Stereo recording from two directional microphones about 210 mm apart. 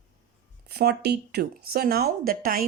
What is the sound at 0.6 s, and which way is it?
Speech, 50° right (ahead or behind).